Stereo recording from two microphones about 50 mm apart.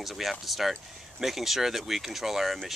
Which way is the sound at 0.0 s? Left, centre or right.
Centre.